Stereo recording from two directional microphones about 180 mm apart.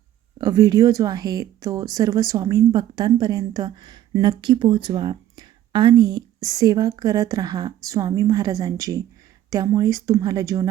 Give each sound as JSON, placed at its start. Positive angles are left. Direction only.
{"t": 0.3, "sound": "speech", "side_deg": -20}